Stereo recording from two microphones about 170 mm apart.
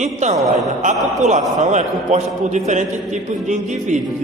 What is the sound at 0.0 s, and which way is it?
A man's voice, 45° right (ahead or behind).